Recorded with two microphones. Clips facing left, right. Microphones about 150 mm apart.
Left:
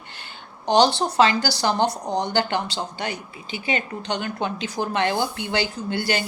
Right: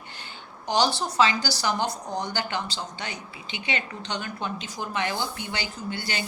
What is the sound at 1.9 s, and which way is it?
Speech, 70° left (ahead or behind).